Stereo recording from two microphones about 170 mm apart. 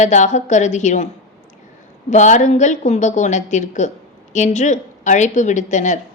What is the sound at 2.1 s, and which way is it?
A woman's voice, 45° left (ahead or behind).